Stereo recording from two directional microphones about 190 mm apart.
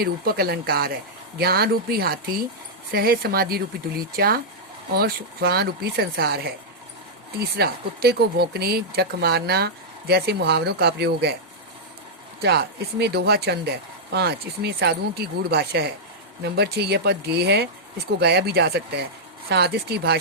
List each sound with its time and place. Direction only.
0.0 s speech: 55° right (ahead or behind)
12.4 s speech: 60° right (ahead or behind)